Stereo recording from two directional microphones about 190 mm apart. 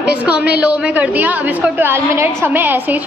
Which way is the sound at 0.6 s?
5° right (ahead or behind).